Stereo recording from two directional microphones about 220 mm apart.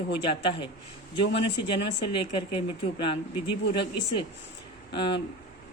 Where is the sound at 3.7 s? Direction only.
20° left (ahead or behind).